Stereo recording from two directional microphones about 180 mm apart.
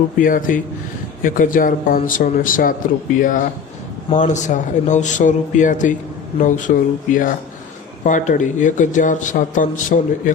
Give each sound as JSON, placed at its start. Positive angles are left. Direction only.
{"t": 0.2, "sound": "a man's voice", "side_deg": 50}